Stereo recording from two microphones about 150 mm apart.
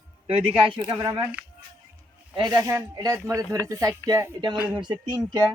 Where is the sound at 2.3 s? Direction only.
25° right (ahead or behind).